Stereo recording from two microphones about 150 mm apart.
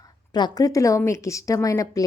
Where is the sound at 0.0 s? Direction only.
25° left (ahead or behind).